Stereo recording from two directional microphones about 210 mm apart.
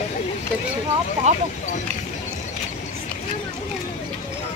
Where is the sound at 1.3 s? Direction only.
35° right (ahead or behind).